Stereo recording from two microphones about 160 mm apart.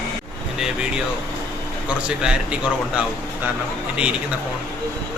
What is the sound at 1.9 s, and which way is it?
Speech, 5° right (ahead or behind).